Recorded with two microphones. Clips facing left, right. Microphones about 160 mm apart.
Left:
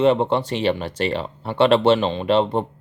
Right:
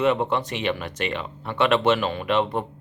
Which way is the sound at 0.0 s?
30° left (ahead or behind).